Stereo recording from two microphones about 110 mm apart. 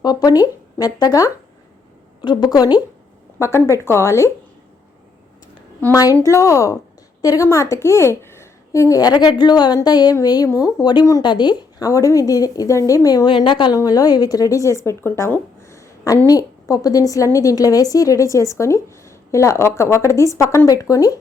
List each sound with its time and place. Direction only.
0.0 s a woman's voice: 40° left (ahead or behind)
3.3 s speech: 25° left (ahead or behind)
5.9 s a woman's voice: 30° left (ahead or behind)
11.9 s a woman's voice: 30° left (ahead or behind); by 13.7 s 45° left (ahead or behind)
13.7 s speech: 35° left (ahead or behind)